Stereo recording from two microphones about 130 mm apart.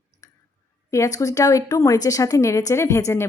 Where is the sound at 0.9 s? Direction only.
25° left (ahead or behind).